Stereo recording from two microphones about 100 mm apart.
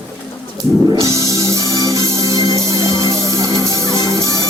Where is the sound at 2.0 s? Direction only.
40° left (ahead or behind).